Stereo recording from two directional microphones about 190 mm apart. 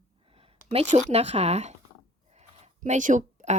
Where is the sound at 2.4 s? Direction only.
35° right (ahead or behind).